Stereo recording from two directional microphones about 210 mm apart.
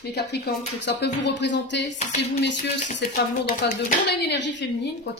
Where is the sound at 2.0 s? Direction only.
35° left (ahead or behind).